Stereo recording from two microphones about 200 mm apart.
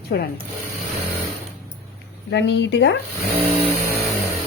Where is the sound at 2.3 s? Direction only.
60° left (ahead or behind).